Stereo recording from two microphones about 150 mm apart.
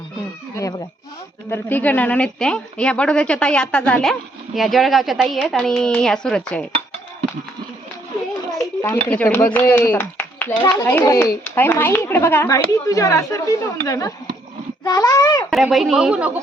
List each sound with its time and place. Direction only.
1.5 s a woman's voice: 15° left (ahead or behind)
8.5 s a child's voice: 15° left (ahead or behind)
10.0 s clapping: 10° left (ahead or behind)
10.6 s speech: 25° left (ahead or behind)
15.4 s a woman's voice: centre (ahead or behind)